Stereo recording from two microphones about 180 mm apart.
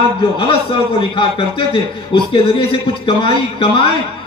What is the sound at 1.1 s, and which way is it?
A man's voice, 30° left (ahead or behind).